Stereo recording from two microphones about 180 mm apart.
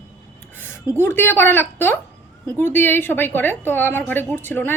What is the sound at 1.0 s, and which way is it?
A woman's voice, 15° left (ahead or behind).